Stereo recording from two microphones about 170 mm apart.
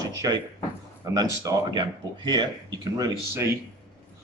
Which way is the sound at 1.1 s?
25° right (ahead or behind).